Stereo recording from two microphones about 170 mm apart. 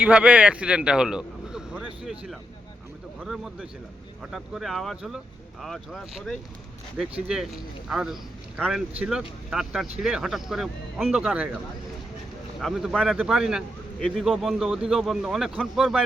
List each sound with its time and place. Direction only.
0.0 s a man's voice: 5° right (ahead or behind)
12.5 s a man's voice: centre (ahead or behind)